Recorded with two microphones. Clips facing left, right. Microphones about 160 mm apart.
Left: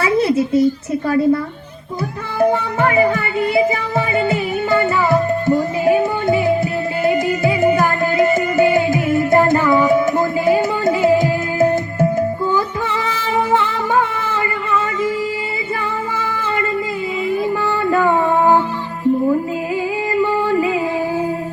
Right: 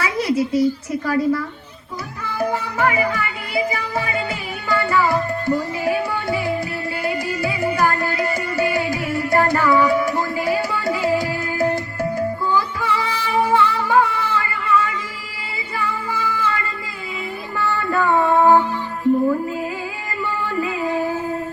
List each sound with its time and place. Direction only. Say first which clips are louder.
0.0 s a woman's voice: left 5 dB; 25° left (ahead or behind)
2.4 s music: left 5 dB; 25° left (ahead or behind)
19.1 s music: left 1 dB; 10° right (ahead or behind)
20.2 s music: left 4 dB; 15° left (ahead or behind)